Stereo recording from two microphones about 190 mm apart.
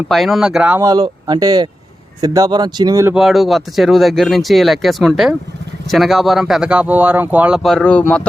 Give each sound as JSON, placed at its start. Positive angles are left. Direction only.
{"t": 0.1, "sound": "speech", "side_deg": 0}
{"t": 0.8, "sound": "speech", "side_deg": -20}
{"t": 3.2, "sound": "speech", "side_deg": 0}